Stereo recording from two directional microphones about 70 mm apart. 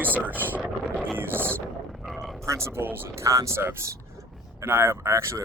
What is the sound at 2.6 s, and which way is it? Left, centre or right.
Speech, right.